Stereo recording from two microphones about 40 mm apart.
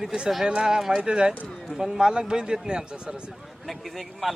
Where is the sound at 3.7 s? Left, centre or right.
Centre.